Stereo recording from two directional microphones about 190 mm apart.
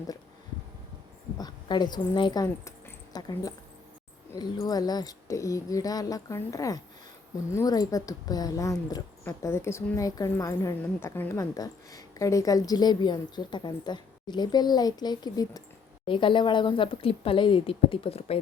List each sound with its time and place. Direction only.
1.4 s speech: 20° left (ahead or behind)